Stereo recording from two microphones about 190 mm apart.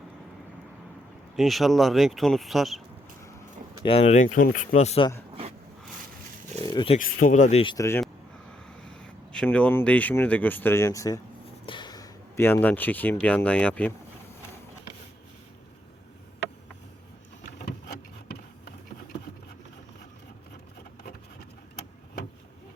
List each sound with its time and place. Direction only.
1.4 s speech: centre (ahead or behind)
3.8 s speech: 30° left (ahead or behind)
5.3 s a sound: 30° right (ahead or behind)
6.6 s speech: 20° left (ahead or behind)
7.0 s speech: 45° left (ahead or behind)
7.6 s speech: 25° left (ahead or behind)
8.9 s speech: 5° left (ahead or behind)
17.7 s a sound: 55° left (ahead or behind)